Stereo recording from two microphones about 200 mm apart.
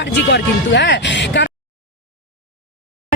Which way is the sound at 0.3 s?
60° left (ahead or behind).